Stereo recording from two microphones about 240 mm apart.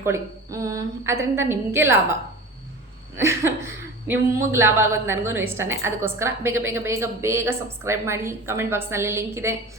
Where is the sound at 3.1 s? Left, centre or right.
Centre.